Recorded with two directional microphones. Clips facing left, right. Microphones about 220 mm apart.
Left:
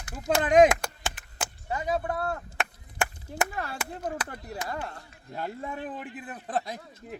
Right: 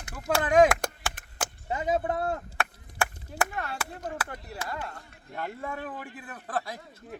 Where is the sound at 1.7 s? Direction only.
25° right (ahead or behind).